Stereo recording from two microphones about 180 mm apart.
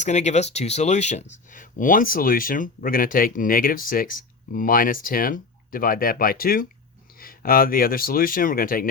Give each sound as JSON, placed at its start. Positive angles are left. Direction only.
{"t": 0.0, "sound": "speech", "side_deg": 40}